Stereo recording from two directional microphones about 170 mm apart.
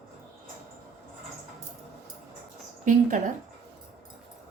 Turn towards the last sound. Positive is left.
turn(degrees=-45)  # may be behind; listen again after turning